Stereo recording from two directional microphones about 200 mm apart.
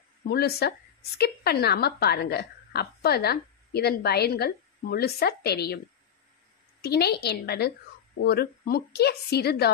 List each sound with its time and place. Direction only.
0.3 s a woman's voice: 50° left (ahead or behind)
6.8 s a woman's voice: 55° left (ahead or behind)